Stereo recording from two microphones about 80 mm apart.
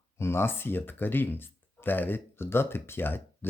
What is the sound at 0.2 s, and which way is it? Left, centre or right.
Speech, left.